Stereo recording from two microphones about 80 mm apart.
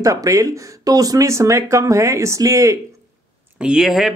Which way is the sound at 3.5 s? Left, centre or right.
Centre.